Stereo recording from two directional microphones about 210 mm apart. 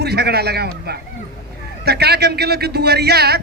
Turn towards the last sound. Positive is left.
turn(degrees=-50)  # may be behind; listen again after turning